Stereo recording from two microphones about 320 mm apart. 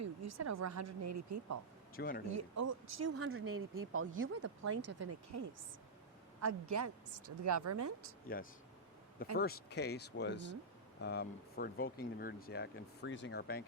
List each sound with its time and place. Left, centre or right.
0.0 s a woman's voice: right
2.0 s speech: left
2.3 s a woman's voice: right
8.3 s speech: left